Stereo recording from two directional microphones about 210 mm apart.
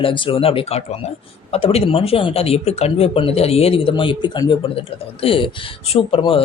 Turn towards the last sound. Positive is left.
turn(degrees=25)  # may be behind; listen again after turning